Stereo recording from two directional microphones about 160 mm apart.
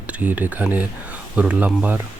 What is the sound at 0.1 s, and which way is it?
Speech, 10° right (ahead or behind).